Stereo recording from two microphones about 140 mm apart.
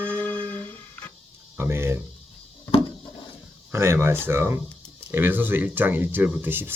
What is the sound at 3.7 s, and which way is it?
Speech, 20° right (ahead or behind).